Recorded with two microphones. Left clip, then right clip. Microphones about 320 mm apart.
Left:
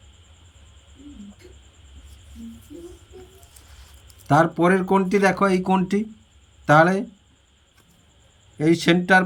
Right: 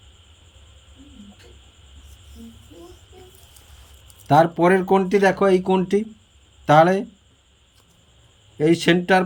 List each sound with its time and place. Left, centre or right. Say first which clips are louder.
4.3 s speech: right 2 dB; centre
8.5 s speech: right 1 dB; centre